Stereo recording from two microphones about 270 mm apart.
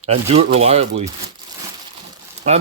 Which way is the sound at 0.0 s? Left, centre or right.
Right.